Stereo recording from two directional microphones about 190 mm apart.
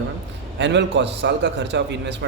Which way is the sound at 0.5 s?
65° right (ahead or behind).